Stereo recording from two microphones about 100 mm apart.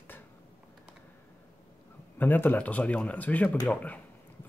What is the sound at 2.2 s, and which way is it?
Speech, 20° left (ahead or behind).